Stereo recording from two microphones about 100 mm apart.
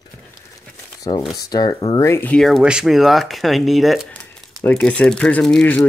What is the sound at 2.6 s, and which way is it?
Speech, 10° right (ahead or behind).